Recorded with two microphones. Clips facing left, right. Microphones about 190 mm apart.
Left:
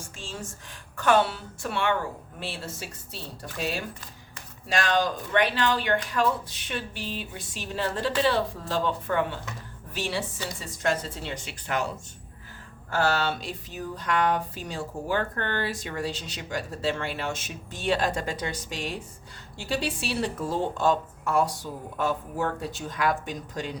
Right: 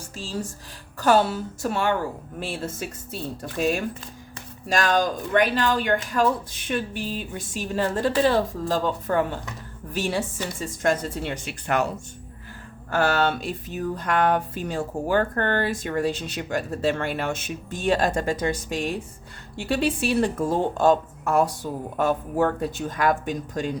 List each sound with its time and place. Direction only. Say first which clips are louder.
0.2 s speech: right 8 dB; 35° right (ahead or behind); by 11.9 s 60° right (ahead or behind)
12.9 s speech: right 4 dB; 55° right (ahead or behind)